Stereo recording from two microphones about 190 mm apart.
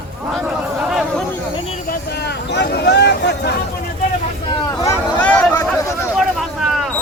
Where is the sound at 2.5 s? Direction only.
65° left (ahead or behind).